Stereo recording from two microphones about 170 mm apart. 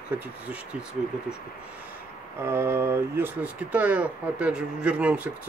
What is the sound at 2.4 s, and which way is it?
Speech, 15° right (ahead or behind).